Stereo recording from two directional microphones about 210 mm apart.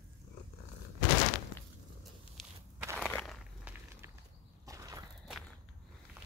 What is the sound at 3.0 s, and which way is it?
Biting, 5° left (ahead or behind).